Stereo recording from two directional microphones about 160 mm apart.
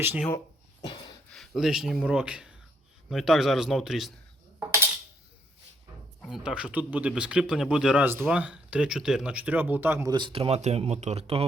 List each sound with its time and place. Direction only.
0.0 s speech: 15° right (ahead or behind)
0.3 s a sound: 20° left (ahead or behind)
1.3 s a man's voice: centre (ahead or behind)
6.3 s speech: 5° right (ahead or behind)
10.1 s speech: 30° right (ahead or behind)